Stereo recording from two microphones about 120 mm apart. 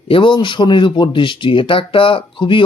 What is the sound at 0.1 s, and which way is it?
Speech, 45° left (ahead or behind).